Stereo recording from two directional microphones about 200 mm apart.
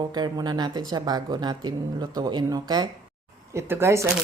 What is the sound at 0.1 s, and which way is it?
Speech, 20° right (ahead or behind).